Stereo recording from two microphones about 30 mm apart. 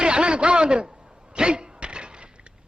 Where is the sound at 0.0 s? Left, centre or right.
Right.